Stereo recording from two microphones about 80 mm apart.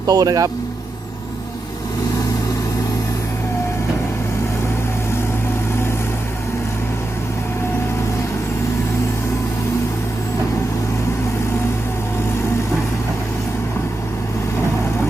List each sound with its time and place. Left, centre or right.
0.0 s speech: right